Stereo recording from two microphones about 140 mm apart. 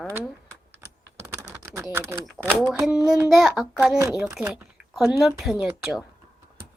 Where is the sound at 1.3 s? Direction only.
20° right (ahead or behind).